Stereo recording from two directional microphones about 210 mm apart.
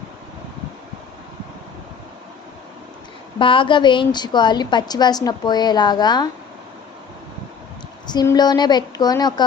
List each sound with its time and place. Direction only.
3.3 s a woman's voice: 25° left (ahead or behind)
8.0 s a woman's voice: 20° left (ahead or behind)